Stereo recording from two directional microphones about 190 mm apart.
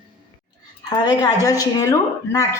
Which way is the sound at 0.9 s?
20° left (ahead or behind).